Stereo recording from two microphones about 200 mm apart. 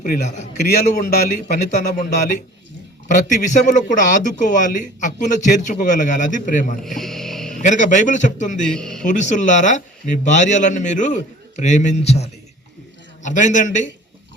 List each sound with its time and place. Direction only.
0.0 s a man's voice: 40° left (ahead or behind)
7.0 s a sound: centre (ahead or behind)
7.5 s a man's voice: 35° left (ahead or behind)
8.6 s speech: 5° left (ahead or behind)
9.0 s a man's voice: 35° left (ahead or behind)